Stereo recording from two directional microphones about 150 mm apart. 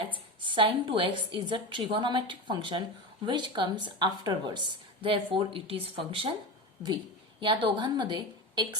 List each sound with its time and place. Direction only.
0.4 s a woman's voice: 35° right (ahead or behind)
7.3 s a woman's voice: 30° right (ahead or behind)